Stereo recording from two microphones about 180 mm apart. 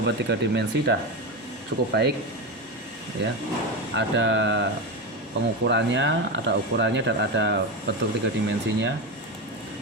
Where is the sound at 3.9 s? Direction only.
85° right.